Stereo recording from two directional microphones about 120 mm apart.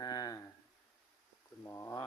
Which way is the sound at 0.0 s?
35° left (ahead or behind).